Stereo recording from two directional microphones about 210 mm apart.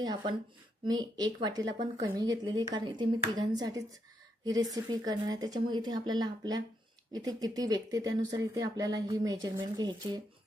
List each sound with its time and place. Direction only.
0.0 s a woman's voice: 20° right (ahead or behind)